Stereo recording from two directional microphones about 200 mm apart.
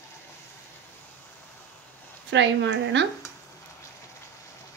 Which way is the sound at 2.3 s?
60° right (ahead or behind).